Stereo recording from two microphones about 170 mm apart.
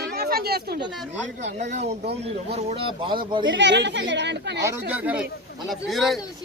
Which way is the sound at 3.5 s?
90° right.